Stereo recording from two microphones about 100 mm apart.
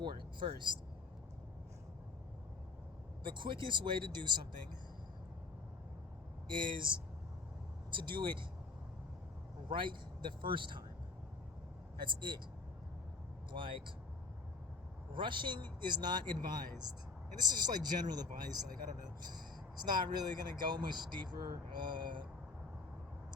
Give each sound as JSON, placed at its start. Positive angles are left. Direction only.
{"t": 0.0, "sound": "speech", "side_deg": -50}
{"t": 3.2, "sound": "speech", "side_deg": -50}
{"t": 6.5, "sound": "speech", "side_deg": -55}
{"t": 9.6, "sound": "a man's voice", "side_deg": -55}
{"t": 11.9, "sound": "speech", "side_deg": -50}
{"t": 13.5, "sound": "speech", "side_deg": -55}
{"t": 15.1, "sound": "speech", "side_deg": -55}